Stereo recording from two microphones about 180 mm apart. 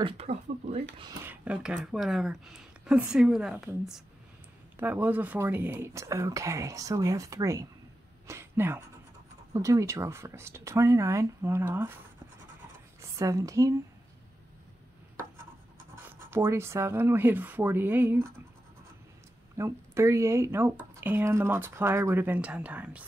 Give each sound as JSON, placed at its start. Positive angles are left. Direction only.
{"t": 0.0, "sound": "speech", "side_deg": -35}
{"t": 1.2, "sound": "speech", "side_deg": -10}
{"t": 13.0, "sound": "speech", "side_deg": -15}
{"t": 16.1, "sound": "speech", "side_deg": -15}
{"t": 19.5, "sound": "speech", "side_deg": -15}